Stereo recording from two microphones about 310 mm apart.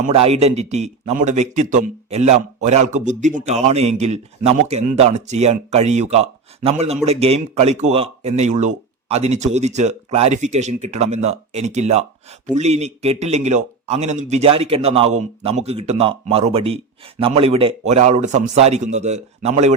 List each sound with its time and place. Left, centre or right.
0.0 s a man's voice: centre